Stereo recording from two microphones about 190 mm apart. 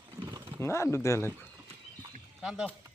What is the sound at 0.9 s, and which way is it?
Speech, 15° left (ahead or behind).